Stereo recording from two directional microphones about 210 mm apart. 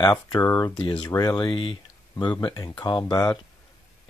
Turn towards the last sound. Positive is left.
turn(degrees=20)  # may be behind; listen again after turning